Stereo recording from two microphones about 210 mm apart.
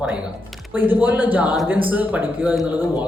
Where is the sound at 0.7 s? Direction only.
10° right (ahead or behind).